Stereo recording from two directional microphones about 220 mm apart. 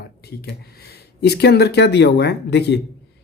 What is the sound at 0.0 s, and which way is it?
Speech, 45° left (ahead or behind).